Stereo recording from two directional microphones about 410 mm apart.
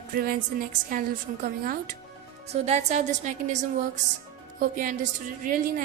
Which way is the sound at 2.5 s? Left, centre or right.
Centre.